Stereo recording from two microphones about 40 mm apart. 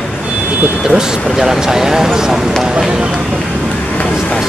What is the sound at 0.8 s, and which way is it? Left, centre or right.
Speech, centre.